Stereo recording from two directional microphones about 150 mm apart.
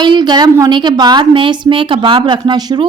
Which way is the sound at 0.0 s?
30° right (ahead or behind).